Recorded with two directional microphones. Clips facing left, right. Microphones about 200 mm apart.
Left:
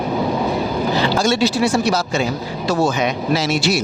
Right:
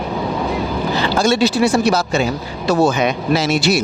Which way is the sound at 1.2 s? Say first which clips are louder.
Right 5 dB; 60° right (ahead or behind).